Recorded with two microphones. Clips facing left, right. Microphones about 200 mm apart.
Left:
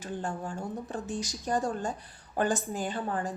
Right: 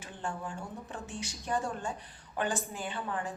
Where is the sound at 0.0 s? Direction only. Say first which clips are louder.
Left 4 dB; 40° left (ahead or behind).